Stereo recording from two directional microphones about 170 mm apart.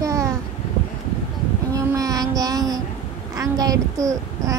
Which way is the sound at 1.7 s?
20° right (ahead or behind).